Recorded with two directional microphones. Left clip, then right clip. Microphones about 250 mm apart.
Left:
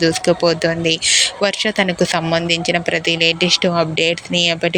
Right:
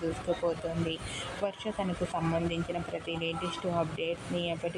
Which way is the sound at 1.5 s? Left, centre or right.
Left.